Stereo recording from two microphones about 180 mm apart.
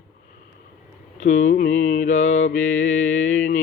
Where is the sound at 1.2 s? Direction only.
45° left (ahead or behind).